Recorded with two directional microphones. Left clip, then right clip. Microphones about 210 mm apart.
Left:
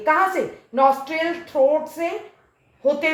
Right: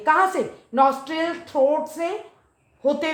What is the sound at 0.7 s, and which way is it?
Speech, 45° right (ahead or behind).